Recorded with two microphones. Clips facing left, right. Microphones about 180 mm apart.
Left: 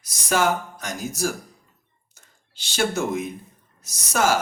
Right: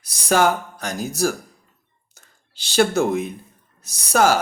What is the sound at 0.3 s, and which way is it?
Speech, 35° right (ahead or behind).